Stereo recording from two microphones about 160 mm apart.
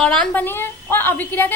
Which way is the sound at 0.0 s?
5° left (ahead or behind).